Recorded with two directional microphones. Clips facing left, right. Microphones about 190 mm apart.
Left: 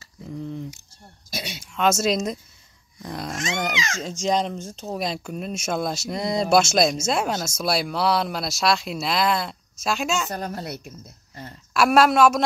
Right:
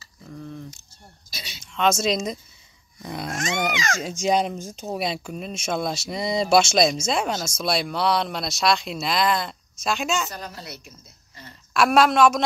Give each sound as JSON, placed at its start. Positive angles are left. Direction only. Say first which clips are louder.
{"t": 0.3, "sound": "speech", "louder": "left 5 dB", "side_deg": 15}
{"t": 1.3, "sound": "a sound", "louder": "left 10 dB", "side_deg": 60}
{"t": 1.6, "sound": "speech", "louder": "even", "side_deg": 5}
{"t": 10.3, "sound": "speech", "louder": "left 7 dB", "side_deg": 50}
{"t": 11.7, "sound": "speech", "louder": "left 1 dB", "side_deg": 5}